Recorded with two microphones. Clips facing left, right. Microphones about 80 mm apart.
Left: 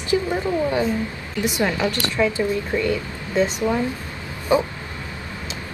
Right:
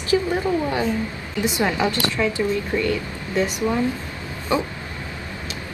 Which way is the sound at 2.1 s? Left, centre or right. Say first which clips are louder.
Left 1 dB; left.